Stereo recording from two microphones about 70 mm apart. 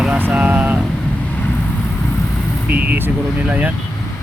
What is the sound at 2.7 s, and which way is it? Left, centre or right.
Speech, right.